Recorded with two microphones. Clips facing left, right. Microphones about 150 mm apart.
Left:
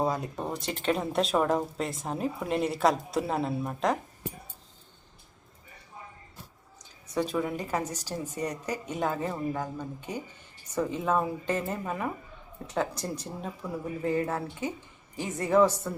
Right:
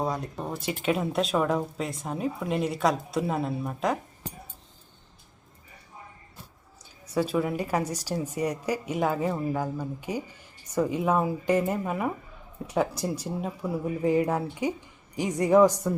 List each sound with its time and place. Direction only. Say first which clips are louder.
0.0 s speech: left 1 dB; centre (ahead or behind)
7.1 s a woman's voice: right 3 dB; 5° right (ahead or behind)